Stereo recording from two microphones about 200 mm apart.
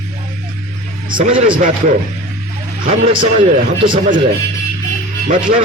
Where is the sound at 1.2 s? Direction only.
30° right (ahead or behind).